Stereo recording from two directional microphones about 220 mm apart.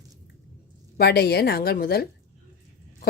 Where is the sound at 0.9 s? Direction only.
45° left (ahead or behind).